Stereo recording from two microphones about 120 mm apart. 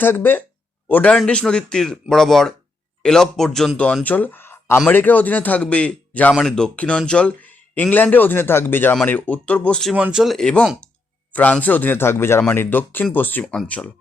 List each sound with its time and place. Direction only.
0.0 s speech: 15° left (ahead or behind)
9.9 s speech: 10° right (ahead or behind)
10.3 s speech: 10° left (ahead or behind)